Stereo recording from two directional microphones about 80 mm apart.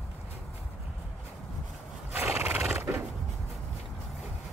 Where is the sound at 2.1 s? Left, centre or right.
Right.